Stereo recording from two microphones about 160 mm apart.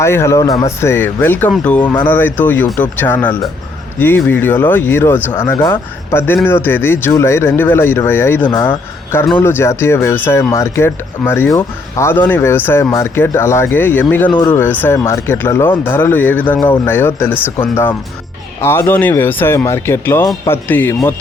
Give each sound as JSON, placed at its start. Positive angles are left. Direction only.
{"t": 0.0, "sound": "speech", "side_deg": 15}
{"t": 14.3, "sound": "speech", "side_deg": 25}
{"t": 14.5, "sound": "speech", "side_deg": 10}